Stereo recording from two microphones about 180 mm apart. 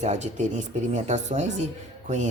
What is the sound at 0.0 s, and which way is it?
Speech, 40° right (ahead or behind).